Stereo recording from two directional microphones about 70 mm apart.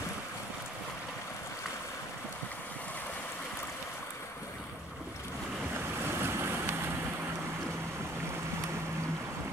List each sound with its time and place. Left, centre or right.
6.0 s waves: right